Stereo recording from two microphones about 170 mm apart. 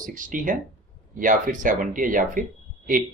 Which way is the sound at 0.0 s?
50° right (ahead or behind).